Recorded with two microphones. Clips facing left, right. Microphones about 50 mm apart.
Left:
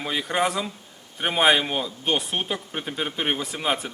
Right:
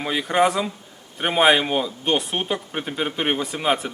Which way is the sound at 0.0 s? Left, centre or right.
Centre.